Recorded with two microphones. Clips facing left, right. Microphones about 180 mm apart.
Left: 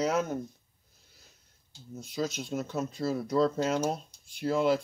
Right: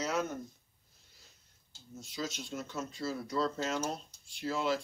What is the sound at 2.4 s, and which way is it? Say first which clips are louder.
Speech: left 7 dB; 55° left (ahead or behind).